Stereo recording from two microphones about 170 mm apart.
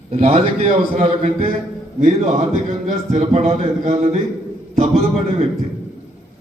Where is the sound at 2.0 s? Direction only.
50° right (ahead or behind).